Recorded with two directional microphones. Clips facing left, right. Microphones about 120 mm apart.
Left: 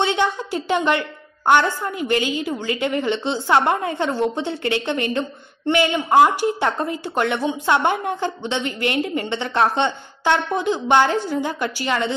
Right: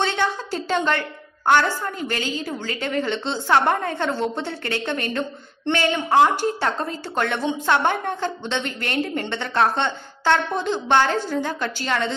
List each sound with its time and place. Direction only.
0.0 s a woman's voice: 15° left (ahead or behind)